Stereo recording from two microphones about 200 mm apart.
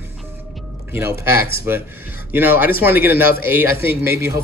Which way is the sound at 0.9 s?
15° right (ahead or behind).